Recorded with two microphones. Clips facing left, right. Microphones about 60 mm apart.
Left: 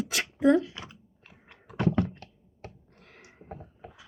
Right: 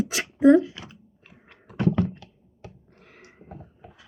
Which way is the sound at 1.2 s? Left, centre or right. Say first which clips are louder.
Even; centre.